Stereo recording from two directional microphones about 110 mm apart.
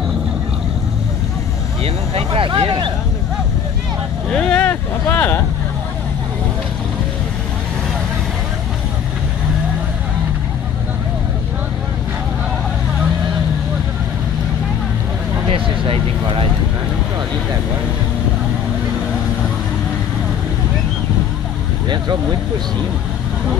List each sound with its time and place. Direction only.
2.1 s speech: 60° right (ahead or behind)
4.3 s speech: 5° left (ahead or behind)
15.5 s speech: 55° right (ahead or behind)
21.8 s speech: 45° right (ahead or behind)